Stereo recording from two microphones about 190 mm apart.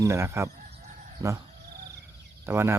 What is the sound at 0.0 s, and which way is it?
Speech, 15° right (ahead or behind).